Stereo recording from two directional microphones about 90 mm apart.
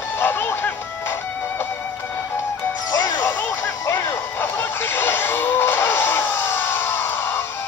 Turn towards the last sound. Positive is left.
turn(degrees=25)  # may be behind; listen again after turning